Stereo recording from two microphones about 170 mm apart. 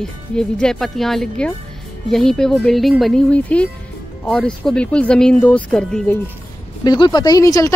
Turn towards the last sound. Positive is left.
turn(degrees=20)  # may be behind; listen again after turning